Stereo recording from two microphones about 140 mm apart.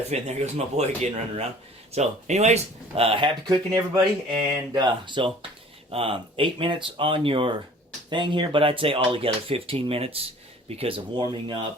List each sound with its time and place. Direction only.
0.1 s speech: 50° right (ahead or behind); by 11.7 s 35° right (ahead or behind)